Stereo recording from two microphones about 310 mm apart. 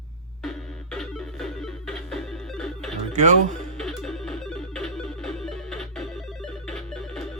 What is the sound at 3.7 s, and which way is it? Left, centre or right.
Music, centre.